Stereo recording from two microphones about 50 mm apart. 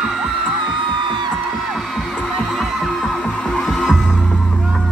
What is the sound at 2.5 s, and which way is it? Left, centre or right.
Music, centre.